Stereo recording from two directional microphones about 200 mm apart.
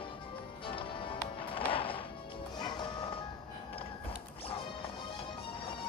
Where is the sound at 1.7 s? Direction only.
25° left (ahead or behind).